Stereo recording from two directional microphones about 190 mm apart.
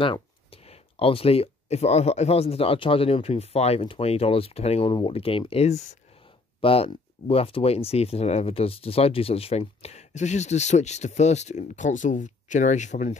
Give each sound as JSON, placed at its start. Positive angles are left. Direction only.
{"t": 0.0, "sound": "speech", "side_deg": 30}